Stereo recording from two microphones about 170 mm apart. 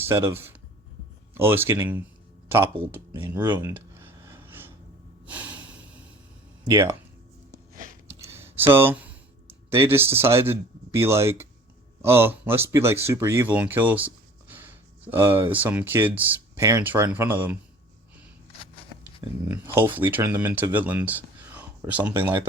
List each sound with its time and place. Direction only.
0.1 s speech: 15° right (ahead or behind)
3.6 s a sound: 15° right (ahead or behind)
5.3 s snort: 10° right (ahead or behind)
6.7 s speech: 20° right (ahead or behind)
8.0 s a sound: 15° right (ahead or behind)
9.6 s speech: 15° right (ahead or behind)
19.5 s speech: 10° right (ahead or behind)